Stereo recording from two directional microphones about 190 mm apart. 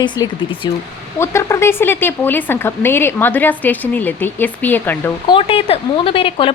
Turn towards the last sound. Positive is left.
turn(degrees=30)  # may be behind; listen again after turning